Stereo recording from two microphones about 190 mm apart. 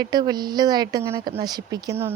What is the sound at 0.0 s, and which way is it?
Speech, 20° right (ahead or behind).